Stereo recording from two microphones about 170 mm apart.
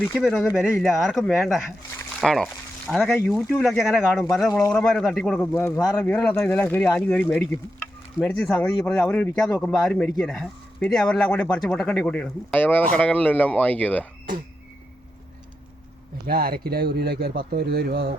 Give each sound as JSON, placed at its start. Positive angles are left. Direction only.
{"t": 0.0, "sound": "speech", "side_deg": 0}
{"t": 5.5, "sound": "speech", "side_deg": 15}
{"t": 5.8, "sound": "speech", "side_deg": 5}
{"t": 16.2, "sound": "speech", "side_deg": -60}